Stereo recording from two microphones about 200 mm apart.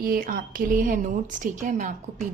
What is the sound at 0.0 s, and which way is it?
A woman's voice, 45° right (ahead or behind).